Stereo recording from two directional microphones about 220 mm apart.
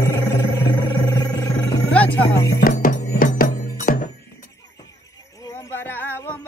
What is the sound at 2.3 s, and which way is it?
Music, 45° left (ahead or behind).